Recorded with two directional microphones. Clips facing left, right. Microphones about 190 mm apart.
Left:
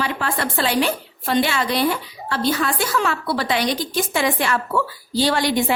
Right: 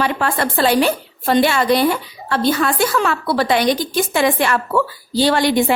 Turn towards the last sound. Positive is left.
turn(degrees=-60)  # may be behind; listen again after turning